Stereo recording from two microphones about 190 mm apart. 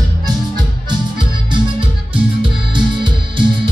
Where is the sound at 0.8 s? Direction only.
25° right (ahead or behind).